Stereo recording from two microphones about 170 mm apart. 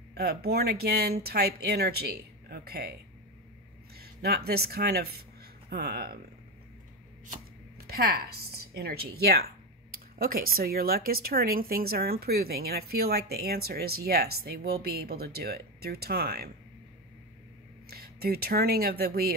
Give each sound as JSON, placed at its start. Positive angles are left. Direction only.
{"t": 0.1, "sound": "speech", "side_deg": -65}
{"t": 3.9, "sound": "speech", "side_deg": -65}
{"t": 7.2, "sound": "speech", "side_deg": -65}
{"t": 17.8, "sound": "speech", "side_deg": -65}